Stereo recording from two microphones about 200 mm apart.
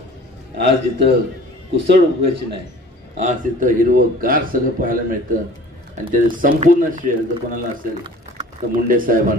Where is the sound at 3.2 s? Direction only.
40° right (ahead or behind).